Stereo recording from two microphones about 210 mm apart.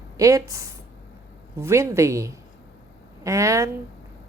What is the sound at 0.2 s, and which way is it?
Speech, 15° right (ahead or behind).